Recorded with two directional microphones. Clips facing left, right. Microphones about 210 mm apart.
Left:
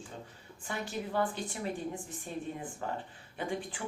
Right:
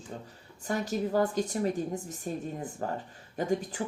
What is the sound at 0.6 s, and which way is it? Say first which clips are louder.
A woman's voice: right 7 dB; 40° right (ahead or behind).